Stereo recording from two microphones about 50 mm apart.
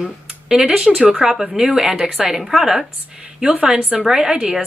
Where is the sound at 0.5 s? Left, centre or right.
Centre.